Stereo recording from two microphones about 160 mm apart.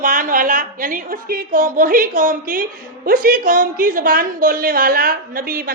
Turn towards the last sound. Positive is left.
turn(degrees=-60)  # may be behind; listen again after turning